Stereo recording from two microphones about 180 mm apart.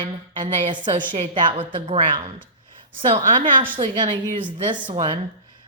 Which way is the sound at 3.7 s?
25° right (ahead or behind).